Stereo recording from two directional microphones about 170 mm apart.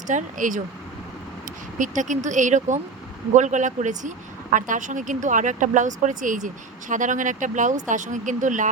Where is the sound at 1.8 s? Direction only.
45° right (ahead or behind).